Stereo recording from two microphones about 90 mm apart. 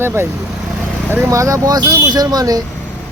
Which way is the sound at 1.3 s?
40° right (ahead or behind).